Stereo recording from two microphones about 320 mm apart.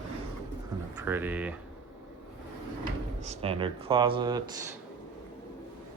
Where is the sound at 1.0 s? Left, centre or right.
Centre.